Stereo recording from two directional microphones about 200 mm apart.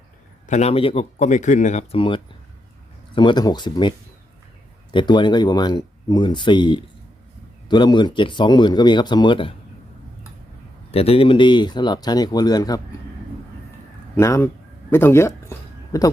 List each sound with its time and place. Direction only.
0.4 s speech: 35° left (ahead or behind)
10.9 s speech: 30° left (ahead or behind)
14.2 s speech: 15° left (ahead or behind)